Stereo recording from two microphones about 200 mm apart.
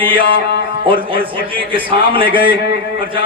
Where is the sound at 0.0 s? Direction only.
25° right (ahead or behind).